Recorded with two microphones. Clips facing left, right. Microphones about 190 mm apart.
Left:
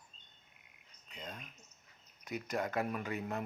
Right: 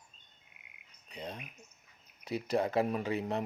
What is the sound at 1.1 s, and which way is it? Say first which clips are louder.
Speech: right 5 dB; 35° right (ahead or behind).